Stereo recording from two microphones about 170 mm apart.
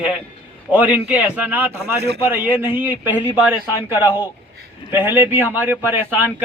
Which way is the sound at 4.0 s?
25° left (ahead or behind).